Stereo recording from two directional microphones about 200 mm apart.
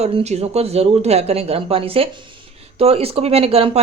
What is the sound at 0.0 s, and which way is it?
Speech, 30° right (ahead or behind).